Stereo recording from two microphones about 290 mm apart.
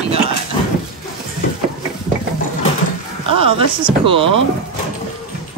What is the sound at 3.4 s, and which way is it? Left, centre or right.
Speech, centre.